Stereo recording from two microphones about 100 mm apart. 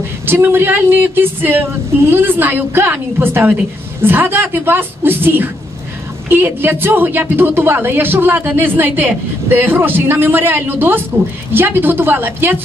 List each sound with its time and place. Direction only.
0.3 s a woman's voice: 20° right (ahead or behind)